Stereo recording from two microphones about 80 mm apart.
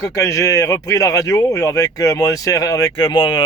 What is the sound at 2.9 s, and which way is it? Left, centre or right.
Speech, left.